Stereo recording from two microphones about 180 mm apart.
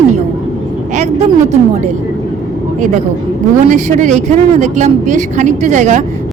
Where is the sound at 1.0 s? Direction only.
40° right (ahead or behind).